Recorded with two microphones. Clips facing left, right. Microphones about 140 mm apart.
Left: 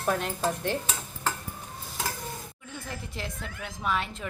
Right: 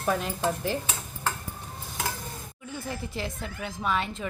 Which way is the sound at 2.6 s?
Centre (ahead or behind).